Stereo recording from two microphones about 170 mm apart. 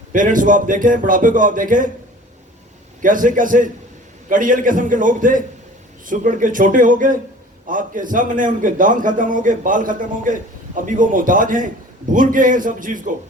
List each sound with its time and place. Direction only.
0.1 s a man's voice: 50° right (ahead or behind)
3.0 s a man's voice: 50° right (ahead or behind)